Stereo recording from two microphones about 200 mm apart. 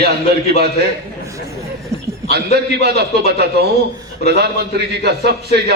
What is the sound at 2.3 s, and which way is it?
A man's voice, 55° right (ahead or behind).